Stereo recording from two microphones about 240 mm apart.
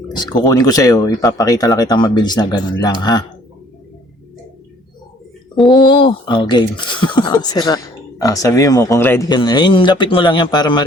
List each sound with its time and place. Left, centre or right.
0.4 s speech: centre
5.7 s speech: centre